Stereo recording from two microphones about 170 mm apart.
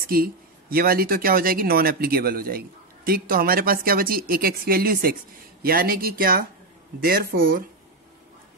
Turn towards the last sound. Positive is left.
turn(degrees=-60)  # may be behind; listen again after turning